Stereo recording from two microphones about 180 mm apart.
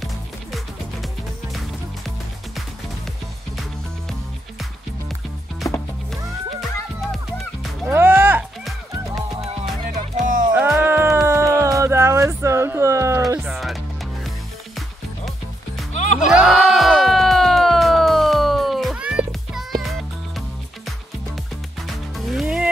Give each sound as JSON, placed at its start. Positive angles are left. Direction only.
{"t": 7.9, "sound": "music", "side_deg": -10}
{"t": 10.2, "sound": "music", "side_deg": -45}
{"t": 10.5, "sound": "music", "side_deg": -10}
{"t": 13.5, "sound": "music", "side_deg": 0}
{"t": 15.9, "sound": "music", "side_deg": 40}
{"t": 16.3, "sound": "music", "side_deg": -5}
{"t": 21.8, "sound": "music", "side_deg": 0}